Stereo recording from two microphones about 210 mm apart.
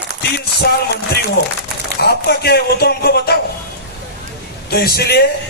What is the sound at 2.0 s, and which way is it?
Speech, 50° left (ahead or behind).